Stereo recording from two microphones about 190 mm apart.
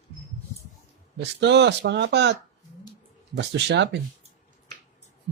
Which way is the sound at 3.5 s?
65° right (ahead or behind).